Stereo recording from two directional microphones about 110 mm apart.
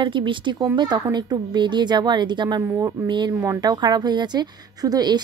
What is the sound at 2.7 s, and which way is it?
A woman's voice, 30° right (ahead or behind).